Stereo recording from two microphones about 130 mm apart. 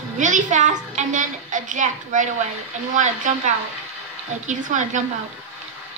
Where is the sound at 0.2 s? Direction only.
70° right (ahead or behind).